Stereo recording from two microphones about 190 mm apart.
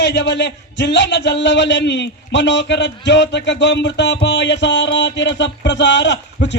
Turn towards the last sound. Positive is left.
turn(degrees=70)  # may be behind; listen again after turning